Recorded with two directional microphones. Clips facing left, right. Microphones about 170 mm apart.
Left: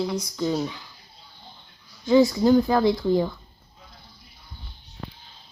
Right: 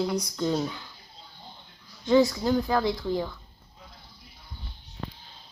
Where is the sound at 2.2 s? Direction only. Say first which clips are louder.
Left 7 dB; 20° left (ahead or behind).